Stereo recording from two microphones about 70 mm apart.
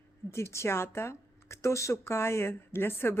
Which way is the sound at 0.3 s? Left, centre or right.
Left.